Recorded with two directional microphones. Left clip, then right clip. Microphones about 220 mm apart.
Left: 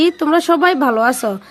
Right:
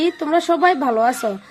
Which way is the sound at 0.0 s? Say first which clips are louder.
Left 4 dB; 25° left (ahead or behind).